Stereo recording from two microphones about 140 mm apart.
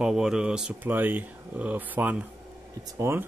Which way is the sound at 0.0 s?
5° right (ahead or behind).